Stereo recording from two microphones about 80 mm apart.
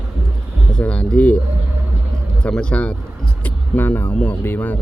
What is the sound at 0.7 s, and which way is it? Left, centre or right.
Speech, centre.